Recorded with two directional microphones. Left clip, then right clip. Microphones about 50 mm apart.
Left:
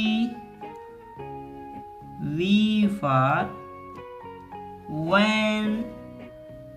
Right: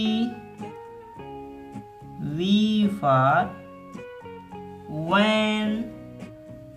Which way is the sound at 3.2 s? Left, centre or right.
Right.